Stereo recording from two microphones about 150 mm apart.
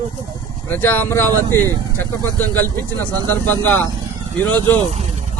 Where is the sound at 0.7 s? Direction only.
10° left (ahead or behind).